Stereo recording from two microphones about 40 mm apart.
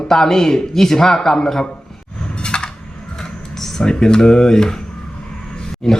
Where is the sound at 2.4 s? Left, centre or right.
Left.